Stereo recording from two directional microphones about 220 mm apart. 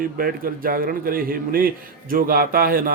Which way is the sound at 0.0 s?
40° right (ahead or behind).